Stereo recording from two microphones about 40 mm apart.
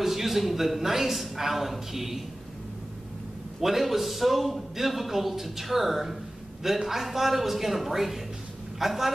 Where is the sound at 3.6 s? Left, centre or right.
Centre.